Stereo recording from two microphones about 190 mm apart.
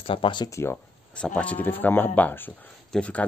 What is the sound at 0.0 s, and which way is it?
Speech, 30° left (ahead or behind).